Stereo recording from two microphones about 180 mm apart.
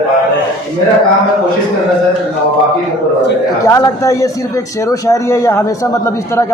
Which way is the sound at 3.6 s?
15° left (ahead or behind).